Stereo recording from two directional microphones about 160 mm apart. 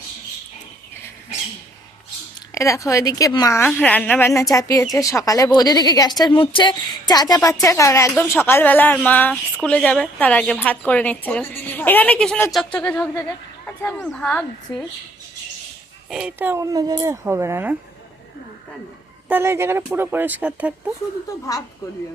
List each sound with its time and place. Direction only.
2.6 s speech: 20° left (ahead or behind)
3.7 s a woman's voice: 5° left (ahead or behind)
16.0 s speech: 5° right (ahead or behind)
19.3 s speech: 15° right (ahead or behind)